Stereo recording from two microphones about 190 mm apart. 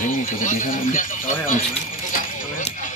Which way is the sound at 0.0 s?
45° left (ahead or behind).